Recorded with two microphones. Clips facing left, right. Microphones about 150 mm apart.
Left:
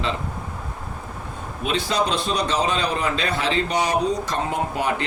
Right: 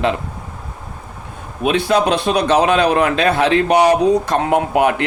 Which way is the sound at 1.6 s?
60° right (ahead or behind).